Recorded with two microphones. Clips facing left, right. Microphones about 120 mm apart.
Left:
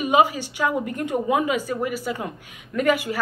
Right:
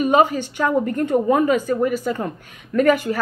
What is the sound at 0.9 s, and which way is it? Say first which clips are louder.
Speech: right 5 dB; 15° left (ahead or behind).